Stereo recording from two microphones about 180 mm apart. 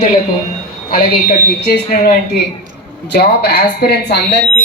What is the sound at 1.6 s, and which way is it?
A woman's voice, 60° left (ahead or behind).